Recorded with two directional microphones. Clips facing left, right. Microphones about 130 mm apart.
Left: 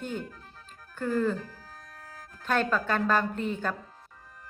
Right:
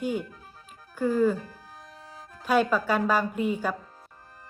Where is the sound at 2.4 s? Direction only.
10° right (ahead or behind).